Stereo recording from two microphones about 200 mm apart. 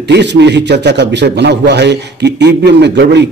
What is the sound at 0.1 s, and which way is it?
A man's voice, 60° right (ahead or behind).